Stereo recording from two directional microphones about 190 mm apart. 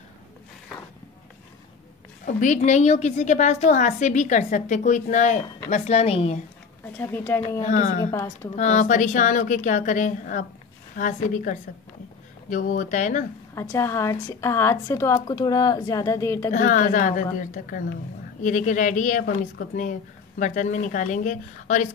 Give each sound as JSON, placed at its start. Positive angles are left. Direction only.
{"t": 2.2, "sound": "a woman's voice", "side_deg": 40}
{"t": 7.0, "sound": "a woman's voice", "side_deg": 10}
{"t": 7.6, "sound": "a woman's voice", "side_deg": 40}
{"t": 8.0, "sound": "a woman's voice", "side_deg": 15}
{"t": 8.5, "sound": "a woman's voice", "side_deg": 40}
{"t": 13.6, "sound": "a woman's voice", "side_deg": 15}
{"t": 16.5, "sound": "a woman's voice", "side_deg": 45}